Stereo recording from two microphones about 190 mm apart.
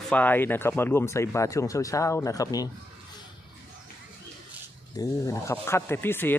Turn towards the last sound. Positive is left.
turn(degrees=10)  # may be behind; listen again after turning